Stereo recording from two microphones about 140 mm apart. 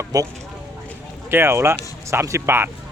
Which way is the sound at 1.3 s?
20° right (ahead or behind).